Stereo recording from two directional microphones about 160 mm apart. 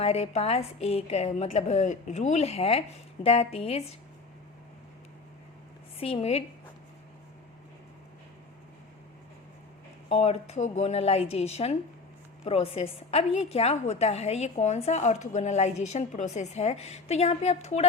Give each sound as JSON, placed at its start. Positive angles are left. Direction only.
{"t": 0.0, "sound": "a woman's voice", "side_deg": 40}
{"t": 6.0, "sound": "a woman's voice", "side_deg": 40}
{"t": 10.1, "sound": "a woman's voice", "side_deg": 45}